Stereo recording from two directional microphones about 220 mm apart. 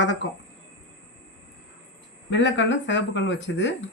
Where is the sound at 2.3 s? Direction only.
60° left (ahead or behind).